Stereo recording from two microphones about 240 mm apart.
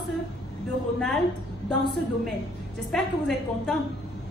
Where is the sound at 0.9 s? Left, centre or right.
Centre.